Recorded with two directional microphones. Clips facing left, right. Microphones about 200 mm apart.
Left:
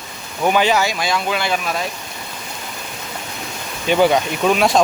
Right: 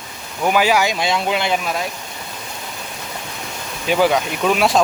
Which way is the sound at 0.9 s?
25° right (ahead or behind).